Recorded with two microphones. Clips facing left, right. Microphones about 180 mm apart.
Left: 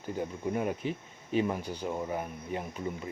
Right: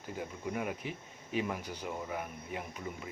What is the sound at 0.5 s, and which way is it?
Speech, 30° left (ahead or behind).